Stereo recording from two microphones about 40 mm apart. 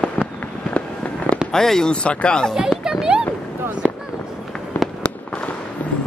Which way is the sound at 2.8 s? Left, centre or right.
Centre.